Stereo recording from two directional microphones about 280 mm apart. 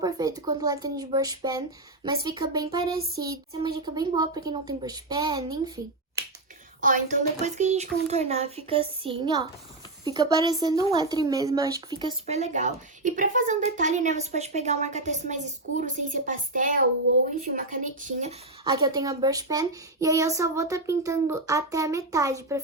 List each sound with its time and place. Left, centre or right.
0.0 s a woman's voice: centre
6.8 s a woman's voice: right; by 22.6 s centre